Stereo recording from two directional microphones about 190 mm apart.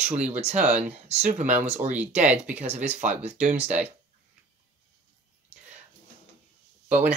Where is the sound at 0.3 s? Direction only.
35° right (ahead or behind).